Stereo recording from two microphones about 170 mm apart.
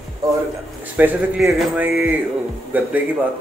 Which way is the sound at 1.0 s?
10° right (ahead or behind).